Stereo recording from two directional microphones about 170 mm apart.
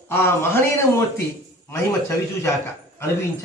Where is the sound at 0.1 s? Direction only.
15° left (ahead or behind).